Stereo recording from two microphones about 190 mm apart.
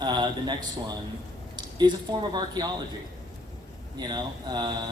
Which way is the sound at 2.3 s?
20° right (ahead or behind).